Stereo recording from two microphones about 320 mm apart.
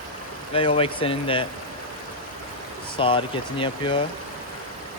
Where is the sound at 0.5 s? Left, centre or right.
Centre.